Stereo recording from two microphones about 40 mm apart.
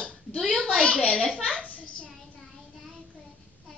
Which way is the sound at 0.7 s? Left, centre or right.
Left.